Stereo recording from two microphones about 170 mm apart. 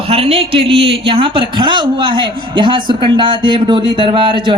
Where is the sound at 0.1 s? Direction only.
35° right (ahead or behind).